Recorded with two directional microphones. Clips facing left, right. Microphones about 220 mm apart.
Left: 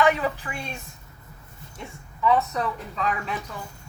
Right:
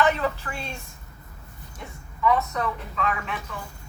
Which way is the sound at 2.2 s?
30° left (ahead or behind).